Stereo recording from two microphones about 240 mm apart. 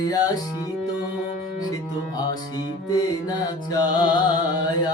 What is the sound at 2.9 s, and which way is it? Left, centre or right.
Mantra, centre.